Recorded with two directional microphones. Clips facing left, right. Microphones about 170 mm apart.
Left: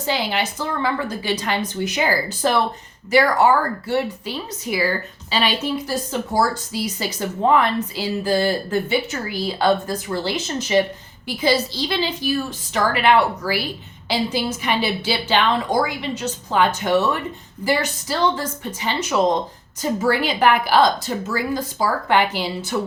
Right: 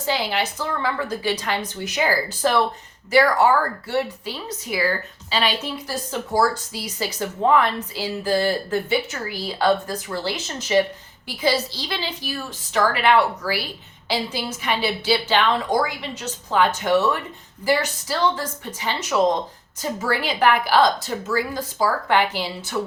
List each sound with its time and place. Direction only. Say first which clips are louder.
0.0 s a woman's voice: left 1 dB; 20° left (ahead or behind)